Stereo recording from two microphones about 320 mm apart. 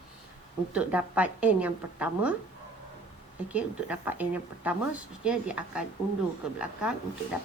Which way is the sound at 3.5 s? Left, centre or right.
Centre.